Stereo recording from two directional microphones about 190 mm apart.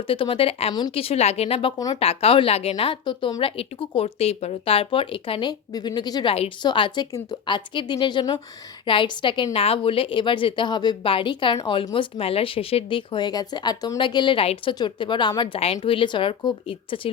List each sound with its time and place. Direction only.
0.1 s a woman's voice: 30° left (ahead or behind)